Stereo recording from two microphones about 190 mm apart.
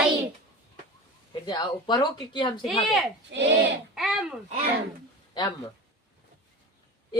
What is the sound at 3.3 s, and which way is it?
Speech, 70° right (ahead or behind).